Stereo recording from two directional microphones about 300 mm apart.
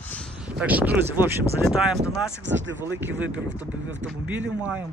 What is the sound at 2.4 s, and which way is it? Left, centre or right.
Speech, right.